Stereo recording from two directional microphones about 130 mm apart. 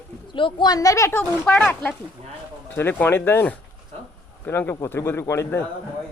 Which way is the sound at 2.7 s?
15° left (ahead or behind).